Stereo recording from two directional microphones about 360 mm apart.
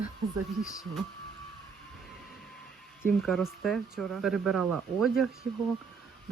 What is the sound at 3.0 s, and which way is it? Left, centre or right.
Speech, centre.